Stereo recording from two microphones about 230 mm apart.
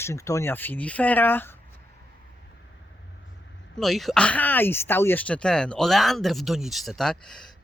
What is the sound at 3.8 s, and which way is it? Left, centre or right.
Speech, centre.